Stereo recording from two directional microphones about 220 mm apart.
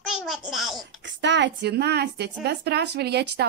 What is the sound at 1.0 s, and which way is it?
A woman's voice, 55° right (ahead or behind).